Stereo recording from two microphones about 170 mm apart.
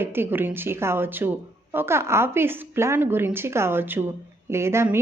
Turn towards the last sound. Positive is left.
turn(degrees=-15)  # may be behind; listen again after turning